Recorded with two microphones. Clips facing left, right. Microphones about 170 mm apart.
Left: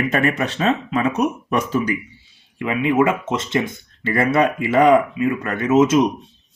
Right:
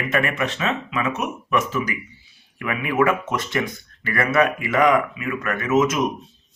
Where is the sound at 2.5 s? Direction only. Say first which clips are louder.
Left 4 dB; 25° left (ahead or behind).